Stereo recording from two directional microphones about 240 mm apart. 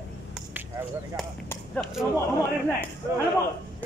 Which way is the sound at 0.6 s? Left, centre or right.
Centre.